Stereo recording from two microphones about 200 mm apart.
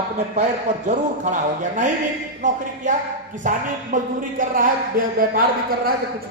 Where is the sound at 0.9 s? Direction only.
35° right (ahead or behind).